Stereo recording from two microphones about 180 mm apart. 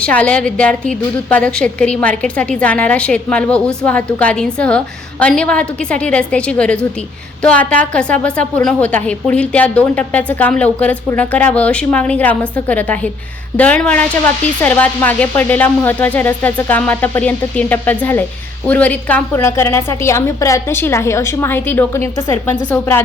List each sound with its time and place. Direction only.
0.0 s a woman's voice: 5° left (ahead or behind)